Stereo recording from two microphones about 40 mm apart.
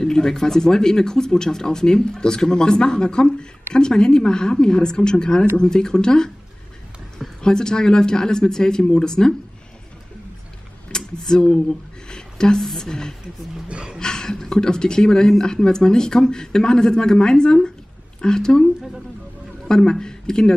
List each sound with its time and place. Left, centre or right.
0.0 s speech: centre
7.4 s speech: centre
10.9 s speech: centre
12.1 s a sound: centre
12.6 s speech: centre
13.7 s speech: right
13.9 s speech: centre
19.7 s speech: centre